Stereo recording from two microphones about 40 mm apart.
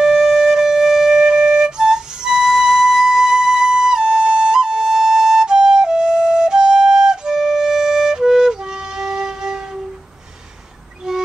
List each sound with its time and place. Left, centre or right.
0.0 s wind instrument: centre
11.1 s music: centre